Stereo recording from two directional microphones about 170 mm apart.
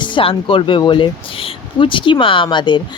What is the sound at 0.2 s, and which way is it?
Speech, 30° left (ahead or behind).